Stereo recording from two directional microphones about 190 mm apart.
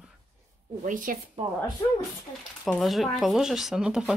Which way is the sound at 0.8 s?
45° right (ahead or behind).